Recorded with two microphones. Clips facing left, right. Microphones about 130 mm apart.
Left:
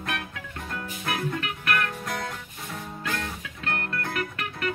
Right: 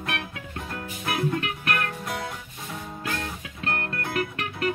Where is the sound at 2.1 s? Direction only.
10° right (ahead or behind).